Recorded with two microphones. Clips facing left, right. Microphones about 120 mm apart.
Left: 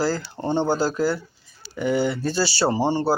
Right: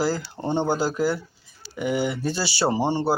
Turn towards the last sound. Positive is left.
turn(degrees=-20)  # may be behind; listen again after turning